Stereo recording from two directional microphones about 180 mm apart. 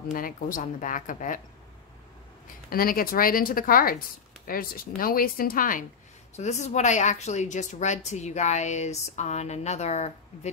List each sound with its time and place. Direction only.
0.1 s speech: 50° left (ahead or behind)
2.7 s speech: 55° left (ahead or behind); by 10.5 s 40° left (ahead or behind)